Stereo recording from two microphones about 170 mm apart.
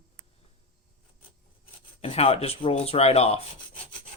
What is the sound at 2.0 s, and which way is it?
Speech, 35° left (ahead or behind).